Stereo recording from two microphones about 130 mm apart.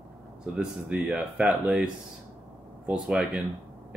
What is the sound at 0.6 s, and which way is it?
Speech, 5° right (ahead or behind).